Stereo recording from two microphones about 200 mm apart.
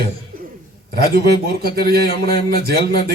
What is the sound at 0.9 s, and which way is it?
Speech, 50° right (ahead or behind).